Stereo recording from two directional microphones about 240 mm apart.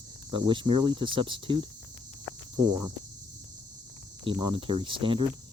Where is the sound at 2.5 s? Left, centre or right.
Centre.